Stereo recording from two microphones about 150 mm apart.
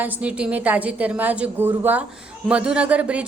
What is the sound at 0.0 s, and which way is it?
A woman's voice, 10° right (ahead or behind).